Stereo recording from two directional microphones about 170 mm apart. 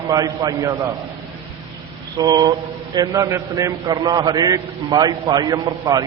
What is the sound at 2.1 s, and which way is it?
A man's voice, 20° right (ahead or behind).